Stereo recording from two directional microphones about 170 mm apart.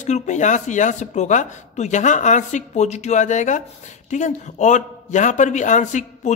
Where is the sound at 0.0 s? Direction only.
45° left (ahead or behind).